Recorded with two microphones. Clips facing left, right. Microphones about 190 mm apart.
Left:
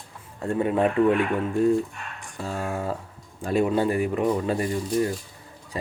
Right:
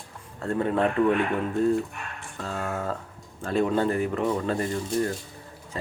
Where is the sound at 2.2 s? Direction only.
15° left (ahead or behind).